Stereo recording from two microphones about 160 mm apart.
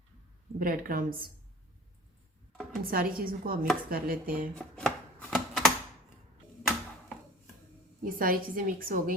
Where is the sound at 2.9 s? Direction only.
65° right (ahead or behind).